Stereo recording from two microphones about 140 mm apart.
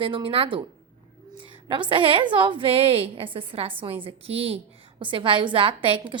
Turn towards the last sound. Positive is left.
turn(degrees=-40)  # may be behind; listen again after turning